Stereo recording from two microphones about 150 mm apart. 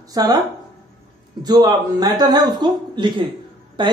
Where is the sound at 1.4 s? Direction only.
25° right (ahead or behind).